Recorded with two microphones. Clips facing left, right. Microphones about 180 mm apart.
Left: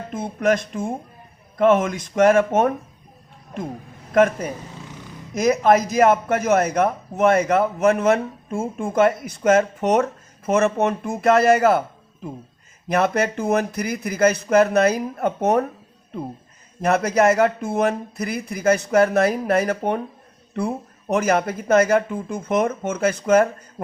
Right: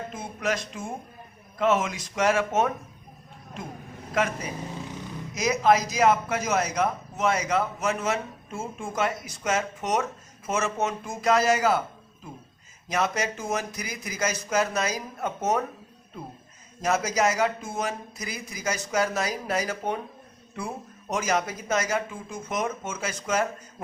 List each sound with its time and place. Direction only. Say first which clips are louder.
0.1 s speech: left 11 dB; 55° left (ahead or behind)
4.1 s a man's voice: left 10 dB; 55° left (ahead or behind)
12.9 s a man's voice: left 7 dB; 55° left (ahead or behind)
16.8 s a man's voice: left 7 dB; 60° left (ahead or behind)